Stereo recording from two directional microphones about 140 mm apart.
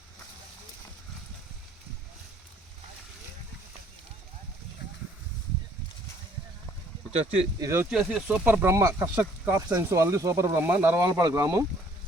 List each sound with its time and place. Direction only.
7.1 s speech: 45° right (ahead or behind)
7.6 s speech: 20° right (ahead or behind)
7.9 s speech: 5° right (ahead or behind)
8.4 s speech: 15° right (ahead or behind)